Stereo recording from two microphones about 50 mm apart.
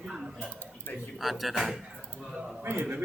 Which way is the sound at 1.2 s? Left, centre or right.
Centre.